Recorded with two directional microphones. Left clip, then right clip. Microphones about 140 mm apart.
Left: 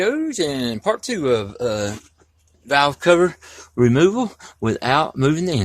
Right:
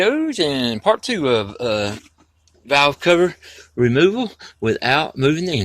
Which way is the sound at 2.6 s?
25° left (ahead or behind).